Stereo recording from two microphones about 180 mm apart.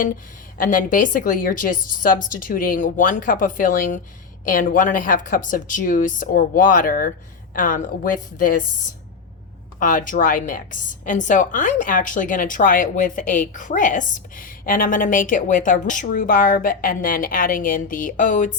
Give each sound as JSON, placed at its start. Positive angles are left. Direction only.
{"t": 0.6, "sound": "a woman's voice", "side_deg": 50}
{"t": 9.8, "sound": "a woman's voice", "side_deg": 50}